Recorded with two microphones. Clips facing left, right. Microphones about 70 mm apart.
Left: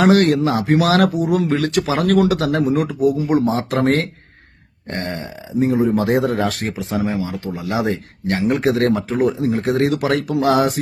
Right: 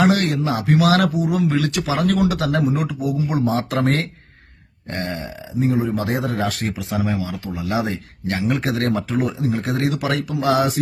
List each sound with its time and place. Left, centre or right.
0.0 s speech: left